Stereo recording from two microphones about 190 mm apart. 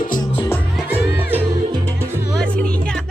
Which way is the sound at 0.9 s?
10° right (ahead or behind).